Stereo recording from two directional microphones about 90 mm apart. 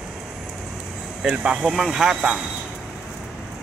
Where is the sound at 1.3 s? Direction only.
10° right (ahead or behind).